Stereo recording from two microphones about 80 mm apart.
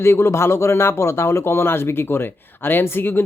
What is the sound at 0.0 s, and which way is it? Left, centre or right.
Speech, left.